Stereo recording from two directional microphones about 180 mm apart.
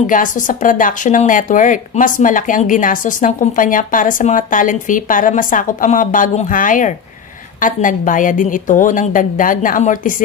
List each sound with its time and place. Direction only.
0.0 s speech: 50° left (ahead or behind)